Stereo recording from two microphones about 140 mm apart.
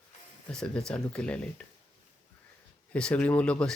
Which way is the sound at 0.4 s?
5° left (ahead or behind).